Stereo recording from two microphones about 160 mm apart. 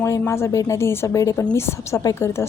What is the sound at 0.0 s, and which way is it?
A woman's voice, 15° left (ahead or behind).